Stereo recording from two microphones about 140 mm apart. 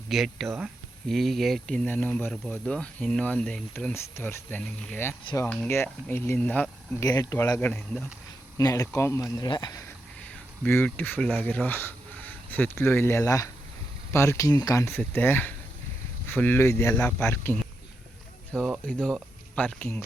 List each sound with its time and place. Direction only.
0.1 s speech: centre (ahead or behind)
0.4 s speech: 20° right (ahead or behind)
1.0 s speech: centre (ahead or behind)
7.0 s speech: 25° left (ahead or behind)
7.6 s speech: 10° left (ahead or behind)
8.5 s speech: 20° left (ahead or behind)
10.2 s speech: 10° left (ahead or behind)
16.9 s speech: 10° left (ahead or behind)